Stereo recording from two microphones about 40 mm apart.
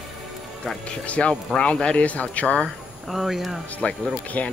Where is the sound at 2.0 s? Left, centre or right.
Left.